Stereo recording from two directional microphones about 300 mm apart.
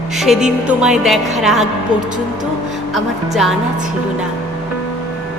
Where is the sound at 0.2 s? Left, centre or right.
Centre.